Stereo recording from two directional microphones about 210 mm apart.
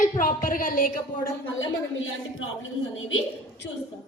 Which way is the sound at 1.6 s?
70° left (ahead or behind).